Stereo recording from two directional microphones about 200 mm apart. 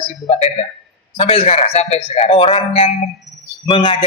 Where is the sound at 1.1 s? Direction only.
30° left (ahead or behind).